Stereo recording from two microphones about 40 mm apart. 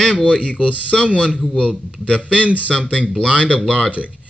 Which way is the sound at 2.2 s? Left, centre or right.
Right.